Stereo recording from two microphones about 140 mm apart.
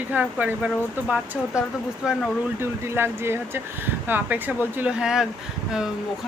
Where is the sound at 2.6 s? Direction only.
15° right (ahead or behind).